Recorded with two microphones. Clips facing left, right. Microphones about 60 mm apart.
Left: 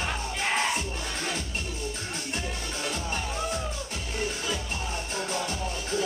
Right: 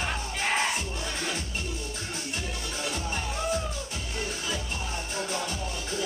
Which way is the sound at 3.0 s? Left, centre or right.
Centre.